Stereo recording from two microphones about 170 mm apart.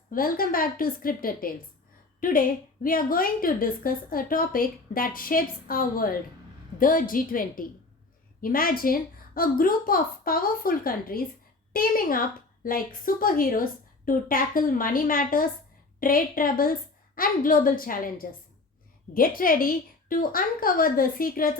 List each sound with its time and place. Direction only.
0.1 s a woman's voice: 55° left (ahead or behind)